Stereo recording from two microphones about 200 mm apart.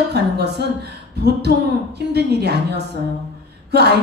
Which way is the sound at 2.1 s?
55° right (ahead or behind).